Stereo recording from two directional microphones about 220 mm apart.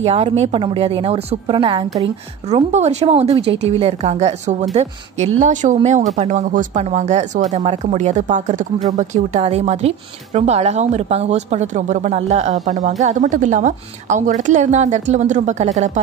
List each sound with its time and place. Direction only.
0.0 s a woman's voice: 30° right (ahead or behind)